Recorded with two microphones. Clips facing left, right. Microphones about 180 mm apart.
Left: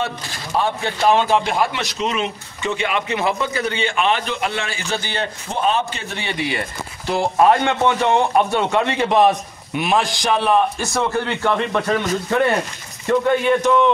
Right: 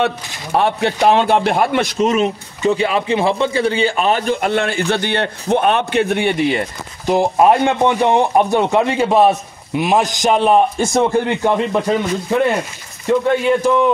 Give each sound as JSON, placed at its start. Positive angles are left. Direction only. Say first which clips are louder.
{"t": 0.5, "sound": "a man's voice", "louder": "right 5 dB", "side_deg": -65}
{"t": 6.5, "sound": "speech", "louder": "right 5 dB", "side_deg": -20}